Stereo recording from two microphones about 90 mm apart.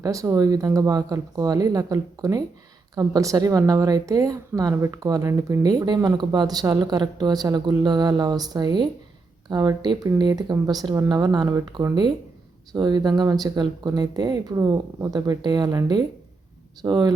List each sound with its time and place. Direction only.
0.0 s speech: 35° right (ahead or behind)
12.7 s speech: 50° right (ahead or behind)